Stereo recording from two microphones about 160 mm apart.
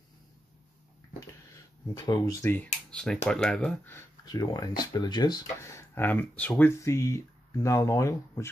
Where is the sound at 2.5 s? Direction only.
10° left (ahead or behind).